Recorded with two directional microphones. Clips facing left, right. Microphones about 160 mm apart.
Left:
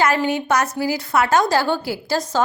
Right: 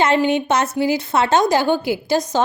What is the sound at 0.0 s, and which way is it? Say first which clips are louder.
A woman's voice: right 3 dB; 25° right (ahead or behind).